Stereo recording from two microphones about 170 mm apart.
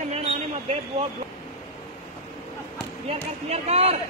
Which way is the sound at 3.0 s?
40° right (ahead or behind).